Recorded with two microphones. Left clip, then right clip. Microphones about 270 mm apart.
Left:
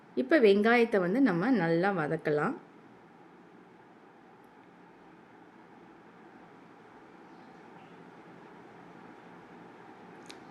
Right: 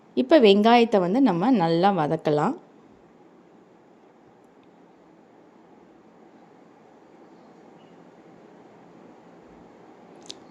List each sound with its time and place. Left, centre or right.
0.1 s a woman's voice: right
10.3 s chewing: right